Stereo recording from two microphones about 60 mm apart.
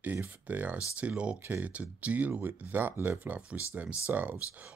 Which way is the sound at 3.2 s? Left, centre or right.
Right.